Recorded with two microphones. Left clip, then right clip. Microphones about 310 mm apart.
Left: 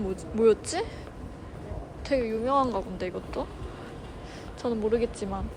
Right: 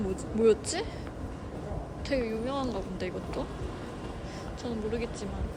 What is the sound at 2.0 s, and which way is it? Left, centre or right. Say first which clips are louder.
Speech: left 5 dB; centre.